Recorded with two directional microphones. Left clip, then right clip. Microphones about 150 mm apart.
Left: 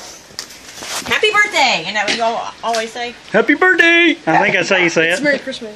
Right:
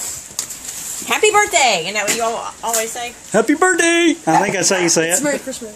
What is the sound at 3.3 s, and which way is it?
Speech, 15° right (ahead or behind).